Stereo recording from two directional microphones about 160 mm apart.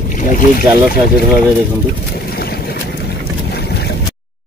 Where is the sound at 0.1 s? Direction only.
55° left (ahead or behind).